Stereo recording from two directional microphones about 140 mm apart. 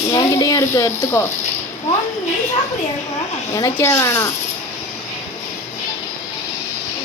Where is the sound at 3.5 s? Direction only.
20° left (ahead or behind).